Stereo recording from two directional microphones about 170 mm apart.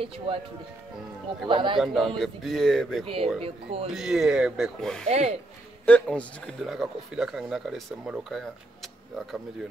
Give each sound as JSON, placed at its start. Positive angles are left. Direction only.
{"t": 0.0, "sound": "speech", "side_deg": -35}
{"t": 1.5, "sound": "a man's voice", "side_deg": -30}
{"t": 1.8, "sound": "speech", "side_deg": 0}
{"t": 3.3, "sound": "speech", "side_deg": -35}
{"t": 3.9, "sound": "speech", "side_deg": -5}
{"t": 5.0, "sound": "speech", "side_deg": -40}
{"t": 5.9, "sound": "speech", "side_deg": 10}